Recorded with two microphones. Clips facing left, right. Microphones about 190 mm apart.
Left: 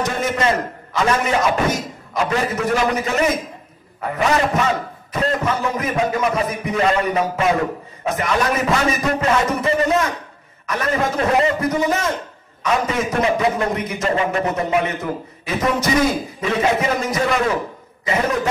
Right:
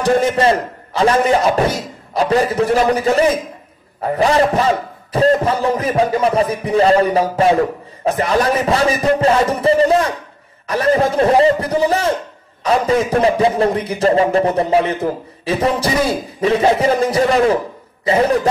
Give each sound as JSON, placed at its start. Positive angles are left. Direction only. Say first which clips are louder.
{"t": 0.0, "sound": "a man's voice", "louder": "right 6 dB", "side_deg": -30}